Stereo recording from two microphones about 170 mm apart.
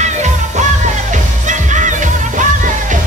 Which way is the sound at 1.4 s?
45° right (ahead or behind).